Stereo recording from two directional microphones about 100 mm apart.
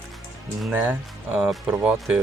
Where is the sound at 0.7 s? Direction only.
20° right (ahead or behind).